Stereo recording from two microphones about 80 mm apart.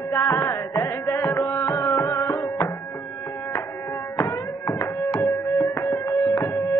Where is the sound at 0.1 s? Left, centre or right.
Left.